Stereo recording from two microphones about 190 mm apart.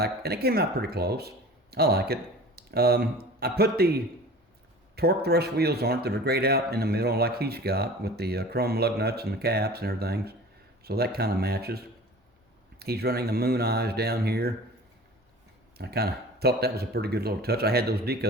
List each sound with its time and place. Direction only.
0.0 s speech: 55° right (ahead or behind)
12.8 s speech: 55° right (ahead or behind)
15.8 s speech: 55° right (ahead or behind)